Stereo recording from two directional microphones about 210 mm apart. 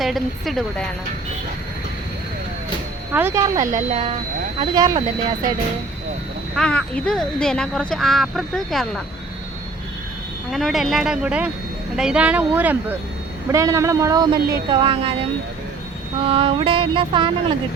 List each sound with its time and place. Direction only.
0.0 s speech: centre (ahead or behind)
3.1 s speech: 10° right (ahead or behind)
3.7 s music: 30° right (ahead or behind)
6.6 s speech: 5° left (ahead or behind)
10.5 s speech: centre (ahead or behind); by 14.3 s 15° right (ahead or behind)
14.7 s music: 25° right (ahead or behind)